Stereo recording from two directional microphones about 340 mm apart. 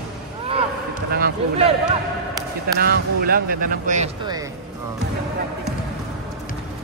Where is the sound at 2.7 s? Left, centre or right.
Right.